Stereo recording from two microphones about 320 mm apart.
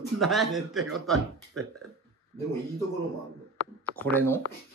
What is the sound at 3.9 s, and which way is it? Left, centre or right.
Speech, centre.